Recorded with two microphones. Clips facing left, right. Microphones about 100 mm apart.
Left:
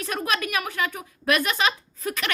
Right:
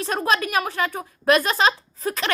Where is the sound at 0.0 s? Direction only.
35° right (ahead or behind).